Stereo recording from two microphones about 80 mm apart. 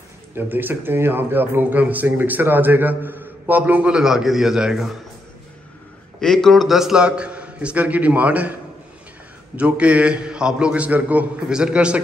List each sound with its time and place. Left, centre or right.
0.3 s speech: right; by 4.9 s centre
6.2 s a man's voice: centre
9.6 s a man's voice: centre